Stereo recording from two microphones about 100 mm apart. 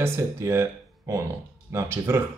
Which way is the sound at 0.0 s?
25° right (ahead or behind).